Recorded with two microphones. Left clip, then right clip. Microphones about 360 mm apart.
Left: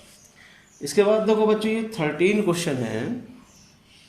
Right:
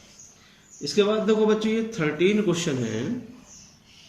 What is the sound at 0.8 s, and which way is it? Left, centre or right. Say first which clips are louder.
Speech: left 3 dB; centre.